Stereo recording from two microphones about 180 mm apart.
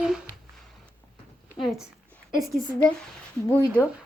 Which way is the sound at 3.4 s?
15° left (ahead or behind).